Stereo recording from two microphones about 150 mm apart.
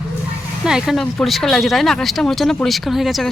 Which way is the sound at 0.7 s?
5° right (ahead or behind).